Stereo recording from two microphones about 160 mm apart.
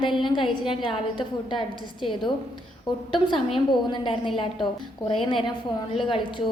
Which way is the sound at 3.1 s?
30° left (ahead or behind).